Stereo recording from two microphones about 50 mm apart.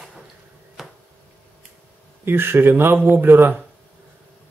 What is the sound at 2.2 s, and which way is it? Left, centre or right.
Speech, right.